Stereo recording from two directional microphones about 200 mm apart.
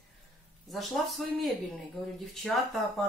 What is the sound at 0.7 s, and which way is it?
Speech, centre (ahead or behind).